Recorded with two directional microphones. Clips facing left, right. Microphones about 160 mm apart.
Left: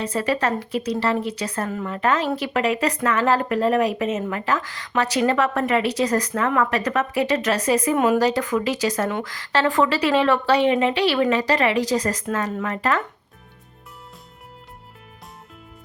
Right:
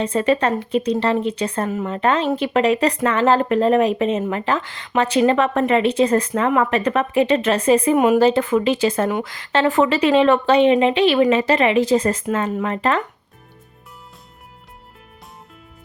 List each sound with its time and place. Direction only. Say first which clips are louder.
0.0 s speech: right 5 dB; 25° right (ahead or behind)
7.9 s speech: right 4 dB; 15° right (ahead or behind)
8.2 s speech: right 5 dB; 25° right (ahead or behind)
9.0 s speech: right 4 dB; 15° right (ahead or behind)